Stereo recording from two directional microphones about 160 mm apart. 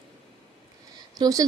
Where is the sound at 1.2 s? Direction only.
20° right (ahead or behind).